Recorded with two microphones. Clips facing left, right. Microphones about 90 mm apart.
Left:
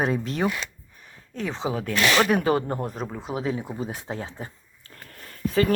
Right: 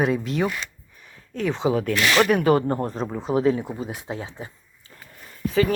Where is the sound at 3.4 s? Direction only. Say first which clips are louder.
Right 8 dB; 10° left (ahead or behind).